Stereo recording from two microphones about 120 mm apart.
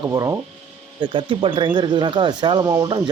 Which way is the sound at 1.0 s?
40° right (ahead or behind).